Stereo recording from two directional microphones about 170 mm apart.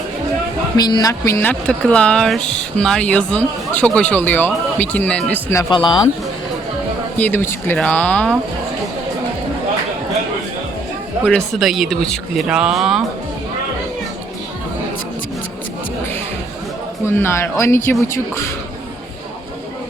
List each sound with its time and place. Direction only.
0.8 s speech: 25° left (ahead or behind)
5.7 s speech: 25° left (ahead or behind)
7.2 s speech: 10° left (ahead or behind)
11.3 s speech: centre (ahead or behind)
17.2 s speech: 15° left (ahead or behind)